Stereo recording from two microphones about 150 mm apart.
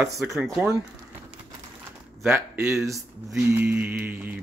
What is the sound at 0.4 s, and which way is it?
Speech, 5° right (ahead or behind).